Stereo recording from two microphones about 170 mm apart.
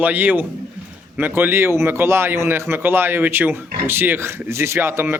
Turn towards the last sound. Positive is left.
turn(degrees=-15)  # may be behind; listen again after turning